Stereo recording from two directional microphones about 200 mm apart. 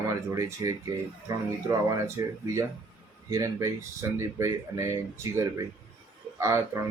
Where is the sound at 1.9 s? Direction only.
15° right (ahead or behind).